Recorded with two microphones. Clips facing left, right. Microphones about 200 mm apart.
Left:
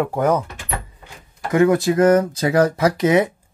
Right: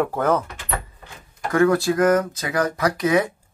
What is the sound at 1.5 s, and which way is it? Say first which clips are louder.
Speech: left 2 dB; 20° left (ahead or behind).